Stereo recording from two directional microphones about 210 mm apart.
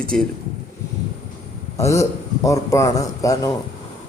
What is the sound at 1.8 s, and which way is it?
A man's voice, 15° left (ahead or behind).